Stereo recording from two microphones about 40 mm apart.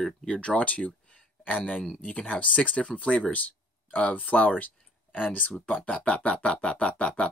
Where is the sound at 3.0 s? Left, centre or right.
Left.